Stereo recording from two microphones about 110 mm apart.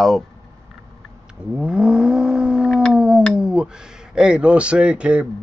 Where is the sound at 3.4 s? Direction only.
5° right (ahead or behind).